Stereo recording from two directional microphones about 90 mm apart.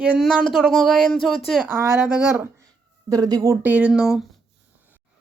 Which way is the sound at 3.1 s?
45° right (ahead or behind).